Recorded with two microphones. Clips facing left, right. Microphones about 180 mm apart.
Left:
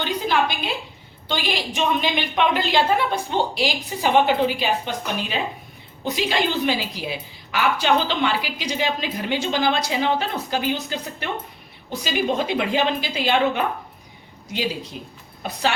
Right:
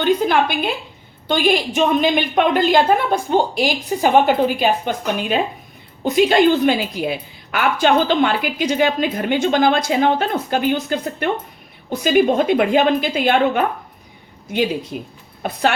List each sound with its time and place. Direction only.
0.0 s a woman's voice: 55° right (ahead or behind)